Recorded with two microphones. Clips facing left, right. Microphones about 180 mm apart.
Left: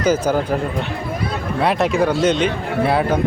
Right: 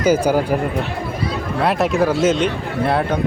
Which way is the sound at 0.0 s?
10° right (ahead or behind).